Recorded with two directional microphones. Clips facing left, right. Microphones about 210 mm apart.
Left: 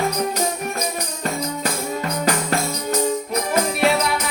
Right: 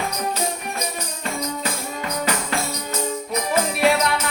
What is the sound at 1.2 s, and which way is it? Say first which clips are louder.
Music: left 2 dB; 35° left (ahead or behind).